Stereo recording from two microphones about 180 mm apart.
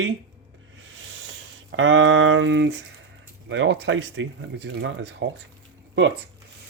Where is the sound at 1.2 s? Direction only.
90° right.